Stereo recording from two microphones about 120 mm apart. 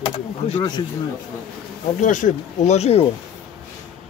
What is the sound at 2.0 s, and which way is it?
Speech, 90° left.